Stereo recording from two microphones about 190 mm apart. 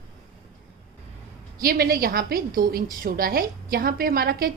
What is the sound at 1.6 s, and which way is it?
A woman's voice, 50° right (ahead or behind).